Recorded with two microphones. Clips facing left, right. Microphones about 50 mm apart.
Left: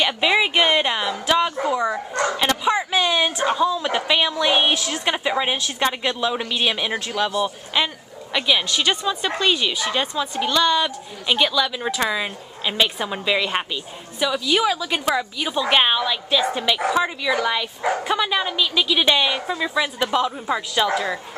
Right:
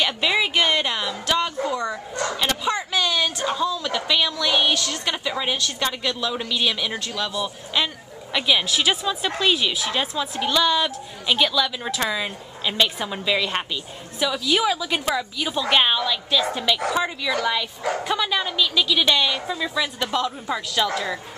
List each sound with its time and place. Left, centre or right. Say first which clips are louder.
0.0 s a sound: left 3 dB; centre
1.7 s dog: left 4 dB; centre
2.2 s bow-wow: left 3 dB; centre
2.9 s a woman's voice: left 3 dB; centre
4.7 s a woman's voice: left 3 dB; centre